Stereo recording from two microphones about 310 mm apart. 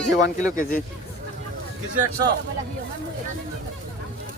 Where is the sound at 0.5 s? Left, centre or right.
Left.